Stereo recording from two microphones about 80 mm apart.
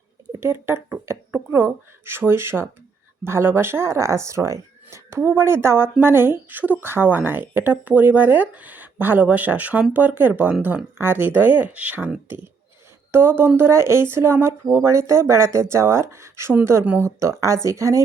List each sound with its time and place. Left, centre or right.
0.3 s a woman's voice: right; by 12.1 s centre
13.1 s a woman's voice: right
16.8 s a woman's voice: right
17.2 s speech: right